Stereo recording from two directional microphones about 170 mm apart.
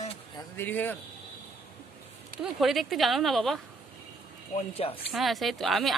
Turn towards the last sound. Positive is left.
turn(degrees=0)  # may be behind; listen again after turning